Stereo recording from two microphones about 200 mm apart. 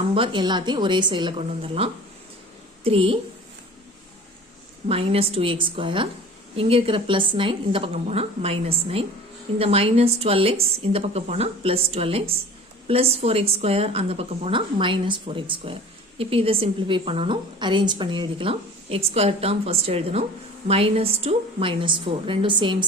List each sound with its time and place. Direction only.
0.1 s a woman's voice: 25° right (ahead or behind)
4.9 s a woman's voice: 30° right (ahead or behind)